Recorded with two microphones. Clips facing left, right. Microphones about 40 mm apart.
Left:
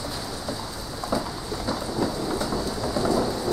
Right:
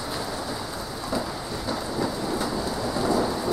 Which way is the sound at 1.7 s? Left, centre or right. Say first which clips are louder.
Left 1 dB; centre.